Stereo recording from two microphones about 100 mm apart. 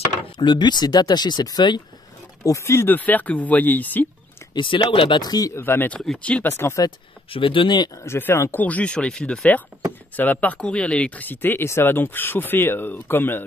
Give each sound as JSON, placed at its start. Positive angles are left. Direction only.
{"t": 0.2, "sound": "speech", "side_deg": 50}
{"t": 2.4, "sound": "speech", "side_deg": 30}
{"t": 4.6, "sound": "speech", "side_deg": 55}
{"t": 5.2, "sound": "speech", "side_deg": 40}
{"t": 5.5, "sound": "speech", "side_deg": 20}
{"t": 5.9, "sound": "speech", "side_deg": 10}
{"t": 6.5, "sound": "speech", "side_deg": 25}
{"t": 7.2, "sound": "speech", "side_deg": 65}
{"t": 8.0, "sound": "speech", "side_deg": 25}